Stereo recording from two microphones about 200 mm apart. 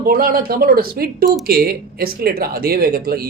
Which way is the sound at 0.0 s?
45° right (ahead or behind).